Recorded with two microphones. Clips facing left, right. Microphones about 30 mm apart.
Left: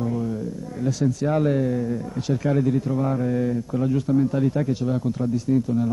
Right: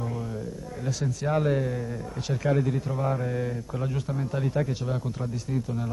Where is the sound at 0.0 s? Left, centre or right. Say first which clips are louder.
Left 7 dB; centre.